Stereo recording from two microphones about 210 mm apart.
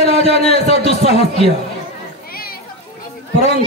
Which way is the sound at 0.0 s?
30° left (ahead or behind).